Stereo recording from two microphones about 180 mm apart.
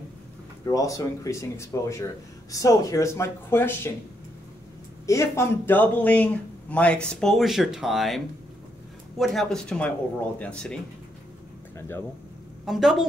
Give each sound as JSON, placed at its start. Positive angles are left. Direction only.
{"t": 0.7, "sound": "speech", "side_deg": 20}
{"t": 5.0, "sound": "speech", "side_deg": 15}
{"t": 9.2, "sound": "speech", "side_deg": 0}
{"t": 12.6, "sound": "speech", "side_deg": 0}